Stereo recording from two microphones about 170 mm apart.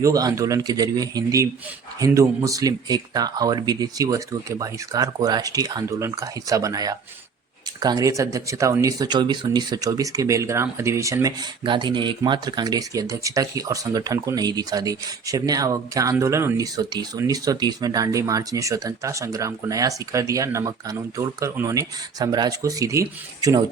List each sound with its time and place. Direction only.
0.0 s speech: 20° right (ahead or behind)